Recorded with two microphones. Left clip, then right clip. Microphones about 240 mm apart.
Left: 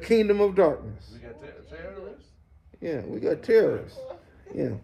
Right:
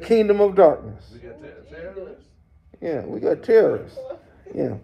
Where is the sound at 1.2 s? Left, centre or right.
Centre.